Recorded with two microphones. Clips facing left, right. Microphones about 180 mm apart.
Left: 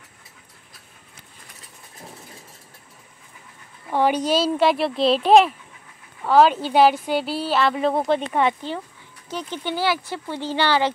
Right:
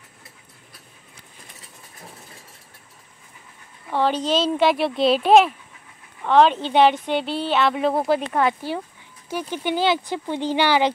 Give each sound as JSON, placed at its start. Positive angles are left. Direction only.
{"t": 3.9, "sound": "a woman's voice", "side_deg": 15}
{"t": 9.3, "sound": "speech", "side_deg": -10}